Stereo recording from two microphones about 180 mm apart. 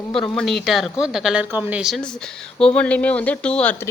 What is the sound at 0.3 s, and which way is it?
A woman's voice, centre (ahead or behind).